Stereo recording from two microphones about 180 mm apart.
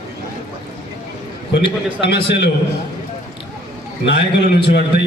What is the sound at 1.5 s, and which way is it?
A man's voice, 70° left (ahead or behind).